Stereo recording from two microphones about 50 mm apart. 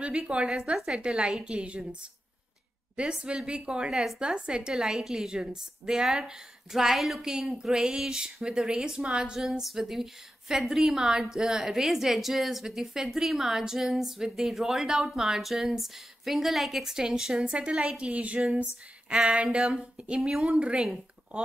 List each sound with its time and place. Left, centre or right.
0.5 s a woman's voice: centre
3.0 s speech: centre
3.9 s a woman's voice: centre
9.5 s a woman's voice: centre
20.2 s a woman's voice: centre
20.4 s speech: centre